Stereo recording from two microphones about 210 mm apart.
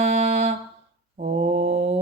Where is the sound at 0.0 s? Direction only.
35° right (ahead or behind).